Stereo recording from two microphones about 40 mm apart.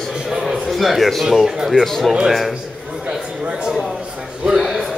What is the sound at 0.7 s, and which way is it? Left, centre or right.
Speech, centre.